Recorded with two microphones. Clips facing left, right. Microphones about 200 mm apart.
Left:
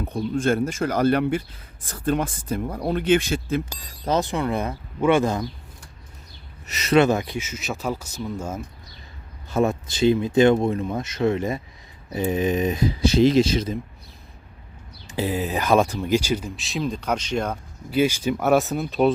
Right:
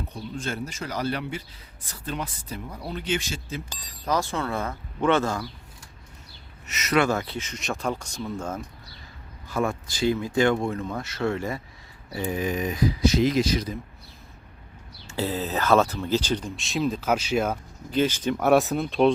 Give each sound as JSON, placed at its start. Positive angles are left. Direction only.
{"t": 0.0, "sound": "speech", "side_deg": 55}
{"t": 4.0, "sound": "speech", "side_deg": 20}
{"t": 6.7, "sound": "speech", "side_deg": 30}
{"t": 9.5, "sound": "speech", "side_deg": 25}
{"t": 15.0, "sound": "speech", "side_deg": 15}
{"t": 17.9, "sound": "speech", "side_deg": 10}